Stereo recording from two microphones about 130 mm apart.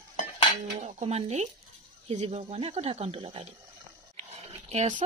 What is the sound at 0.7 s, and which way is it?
Speech, 60° right (ahead or behind).